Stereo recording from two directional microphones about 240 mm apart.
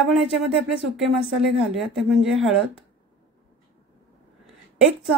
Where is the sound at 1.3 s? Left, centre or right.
Centre.